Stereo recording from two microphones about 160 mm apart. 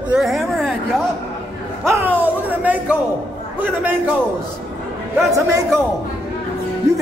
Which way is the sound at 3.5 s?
10° right (ahead or behind).